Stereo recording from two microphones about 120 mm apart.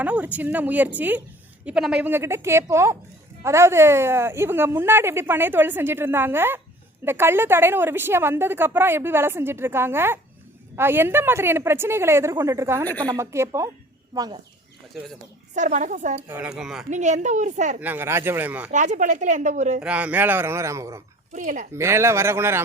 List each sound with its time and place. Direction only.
0.0 s speech: 10° right (ahead or behind)
14.1 s speech: 35° right (ahead or behind)
15.5 s speech: 90° right
16.3 s speech: 10° right (ahead or behind)
16.9 s a woman's voice: 80° right
17.7 s speech: 15° right (ahead or behind)
18.7 s speech: 90° right
19.8 s speech: 10° right (ahead or behind)
21.3 s speech: 90° right
21.7 s speech: 20° right (ahead or behind)